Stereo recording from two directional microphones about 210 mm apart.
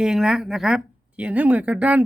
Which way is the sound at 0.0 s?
Centre (ahead or behind).